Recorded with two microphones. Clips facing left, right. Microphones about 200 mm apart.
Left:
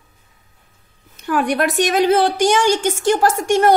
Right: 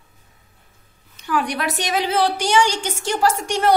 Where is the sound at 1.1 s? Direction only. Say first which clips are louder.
Left 5 dB; 50° left (ahead or behind).